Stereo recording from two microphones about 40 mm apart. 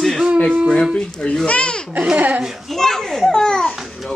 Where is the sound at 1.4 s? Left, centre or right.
Left.